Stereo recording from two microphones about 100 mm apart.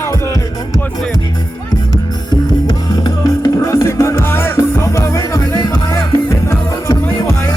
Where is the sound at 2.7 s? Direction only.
40° left (ahead or behind).